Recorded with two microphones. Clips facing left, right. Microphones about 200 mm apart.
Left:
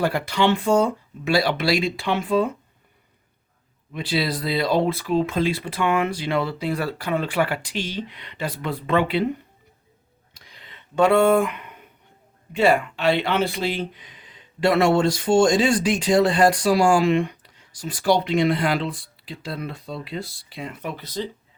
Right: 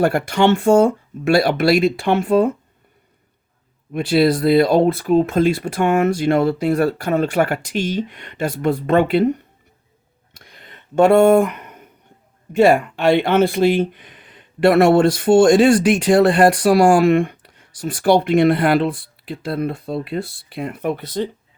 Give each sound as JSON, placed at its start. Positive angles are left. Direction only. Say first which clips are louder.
{"t": 0.0, "sound": "speech", "louder": "right 5 dB", "side_deg": -50}
{"t": 3.9, "sound": "speech", "louder": "right 9 dB", "side_deg": -50}
{"t": 10.4, "sound": "a sound", "louder": "right 4 dB", "side_deg": -50}
{"t": 12.5, "sound": "speech", "louder": "right 5 dB", "side_deg": -45}